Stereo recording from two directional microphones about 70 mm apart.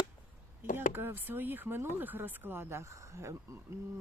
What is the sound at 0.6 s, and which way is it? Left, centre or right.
Speech, right.